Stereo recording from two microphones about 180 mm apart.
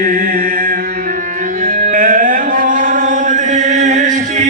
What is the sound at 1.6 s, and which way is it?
Music, 50° right (ahead or behind).